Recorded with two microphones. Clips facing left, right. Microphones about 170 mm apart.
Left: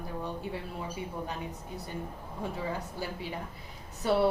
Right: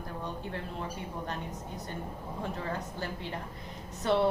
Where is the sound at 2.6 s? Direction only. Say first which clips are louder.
Left 1 dB; 10° left (ahead or behind).